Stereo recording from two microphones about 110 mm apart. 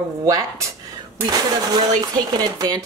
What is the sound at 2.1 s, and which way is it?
Speech, 40° right (ahead or behind).